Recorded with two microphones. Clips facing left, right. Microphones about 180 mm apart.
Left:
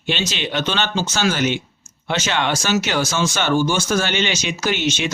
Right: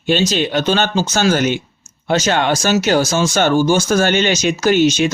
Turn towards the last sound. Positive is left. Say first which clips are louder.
# right 8 dB
turn(degrees=-40)  # may be behind; listen again after turning